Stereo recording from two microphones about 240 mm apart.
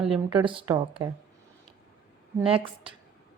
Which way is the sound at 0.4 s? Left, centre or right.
Right.